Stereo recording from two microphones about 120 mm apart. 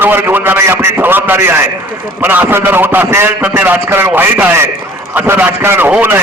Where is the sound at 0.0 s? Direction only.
15° right (ahead or behind).